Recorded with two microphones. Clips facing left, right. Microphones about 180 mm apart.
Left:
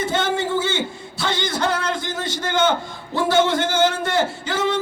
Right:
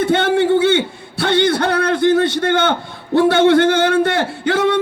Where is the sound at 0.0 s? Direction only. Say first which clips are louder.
Right 7 dB; 60° right (ahead or behind).